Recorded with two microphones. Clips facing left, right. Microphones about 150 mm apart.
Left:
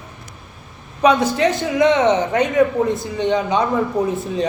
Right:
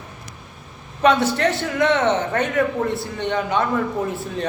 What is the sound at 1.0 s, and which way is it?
A man's voice, 15° left (ahead or behind).